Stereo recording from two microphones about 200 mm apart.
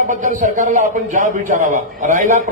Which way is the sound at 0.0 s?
40° right (ahead or behind).